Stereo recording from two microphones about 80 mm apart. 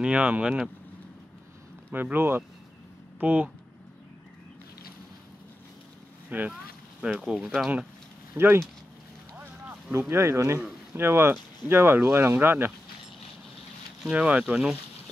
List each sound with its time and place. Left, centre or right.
0.0 s speech: centre
1.9 s speech: right
6.3 s speech: right; by 7.7 s centre
8.4 s speech: right
9.4 s a sound: right
9.9 s speech: right
14.1 s speech: centre